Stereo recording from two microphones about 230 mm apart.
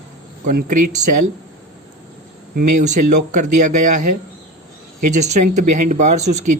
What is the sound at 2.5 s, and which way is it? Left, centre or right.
Speech, right.